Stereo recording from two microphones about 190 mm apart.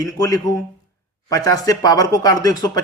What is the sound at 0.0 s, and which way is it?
Speech, 20° left (ahead or behind).